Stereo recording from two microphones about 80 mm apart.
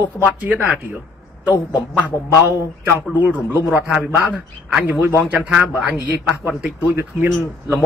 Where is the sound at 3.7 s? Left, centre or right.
Centre.